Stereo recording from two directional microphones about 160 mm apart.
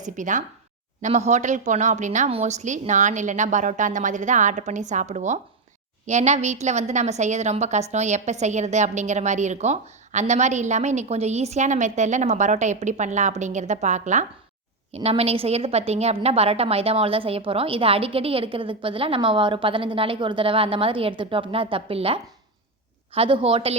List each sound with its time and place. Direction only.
0.0 s a woman's voice: 50° right (ahead or behind); by 23.7 s 35° right (ahead or behind)